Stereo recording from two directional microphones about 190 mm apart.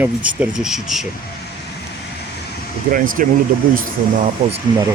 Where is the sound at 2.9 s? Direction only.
45° right (ahead or behind).